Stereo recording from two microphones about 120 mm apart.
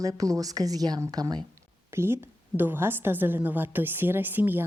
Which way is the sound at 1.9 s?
20° right (ahead or behind).